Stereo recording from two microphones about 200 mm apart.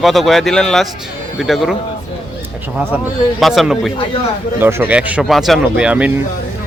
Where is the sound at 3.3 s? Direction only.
Centre (ahead or behind).